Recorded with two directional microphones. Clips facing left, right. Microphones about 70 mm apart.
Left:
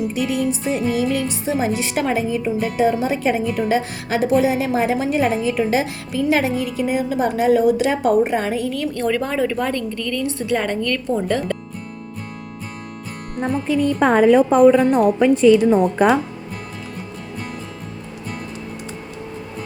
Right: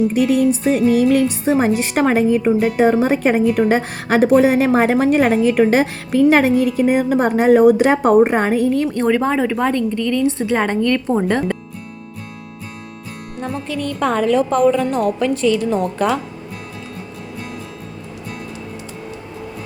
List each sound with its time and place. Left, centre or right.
0.1 s a woman's voice: right
13.7 s a woman's voice: centre